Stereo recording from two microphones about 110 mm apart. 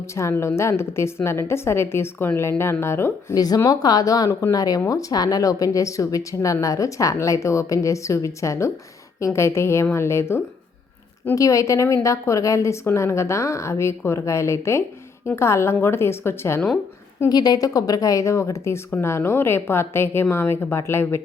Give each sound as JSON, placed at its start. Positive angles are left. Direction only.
{"t": 0.2, "sound": "speech", "side_deg": 25}
{"t": 3.4, "sound": "a woman's voice", "side_deg": 35}
{"t": 17.2, "sound": "a woman's voice", "side_deg": 35}